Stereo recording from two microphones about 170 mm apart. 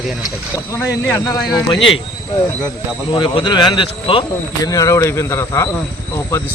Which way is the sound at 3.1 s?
30° left (ahead or behind).